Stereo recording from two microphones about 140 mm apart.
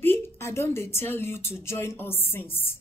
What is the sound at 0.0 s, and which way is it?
A woman's voice, 15° left (ahead or behind).